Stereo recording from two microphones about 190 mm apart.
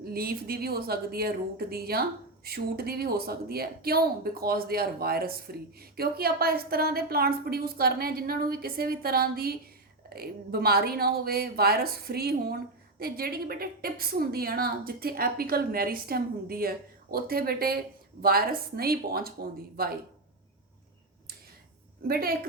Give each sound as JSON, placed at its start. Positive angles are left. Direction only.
{"t": 0.0, "sound": "speech", "side_deg": -55}
{"t": 22.0, "sound": "speech", "side_deg": -50}